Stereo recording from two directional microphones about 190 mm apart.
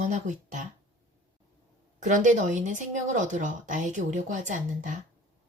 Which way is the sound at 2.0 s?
40° right (ahead or behind).